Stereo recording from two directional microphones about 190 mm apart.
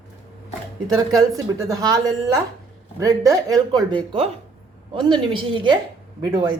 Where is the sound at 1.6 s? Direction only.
20° right (ahead or behind).